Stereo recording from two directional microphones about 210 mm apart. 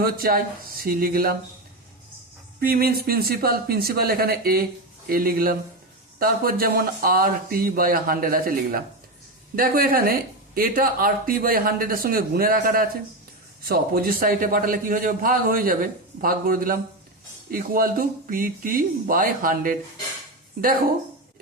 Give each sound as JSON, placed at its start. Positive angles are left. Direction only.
{"t": 0.0, "sound": "speech", "side_deg": -45}
{"t": 2.6, "sound": "speech", "side_deg": -45}